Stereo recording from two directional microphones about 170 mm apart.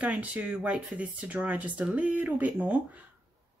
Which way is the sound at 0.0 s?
5° right (ahead or behind).